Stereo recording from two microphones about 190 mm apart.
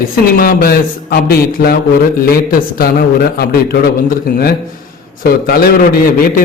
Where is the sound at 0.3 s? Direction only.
50° left (ahead or behind).